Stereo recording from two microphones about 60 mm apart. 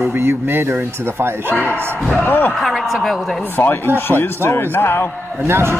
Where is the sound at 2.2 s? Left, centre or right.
Left.